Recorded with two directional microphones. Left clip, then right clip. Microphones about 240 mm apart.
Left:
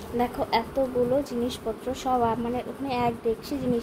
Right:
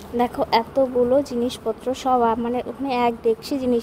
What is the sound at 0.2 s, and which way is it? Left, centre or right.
Speech, right.